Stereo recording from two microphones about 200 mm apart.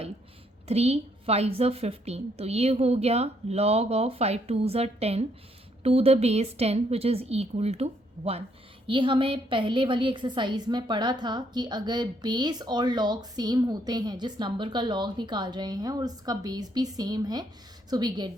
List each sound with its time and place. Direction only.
0.7 s a woman's voice: 30° right (ahead or behind)